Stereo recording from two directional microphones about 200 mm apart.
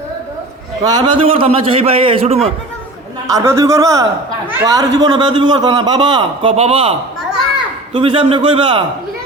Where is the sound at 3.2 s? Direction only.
15° right (ahead or behind).